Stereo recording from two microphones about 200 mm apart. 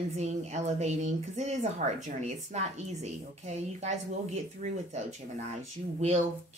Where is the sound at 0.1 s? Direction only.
35° right (ahead or behind).